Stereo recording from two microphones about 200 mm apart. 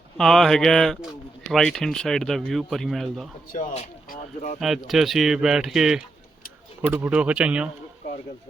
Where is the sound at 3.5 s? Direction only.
35° left (ahead or behind).